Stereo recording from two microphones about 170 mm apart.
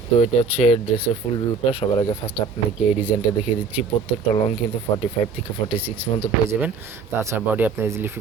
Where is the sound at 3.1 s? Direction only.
30° left (ahead or behind).